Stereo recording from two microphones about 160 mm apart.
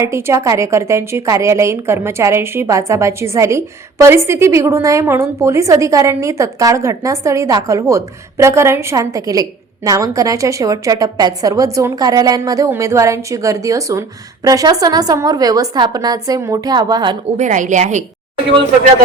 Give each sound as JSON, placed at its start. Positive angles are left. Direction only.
{"t": 0.0, "sound": "a woman's voice", "side_deg": -15}
{"t": 17.3, "sound": "a woman's voice", "side_deg": -50}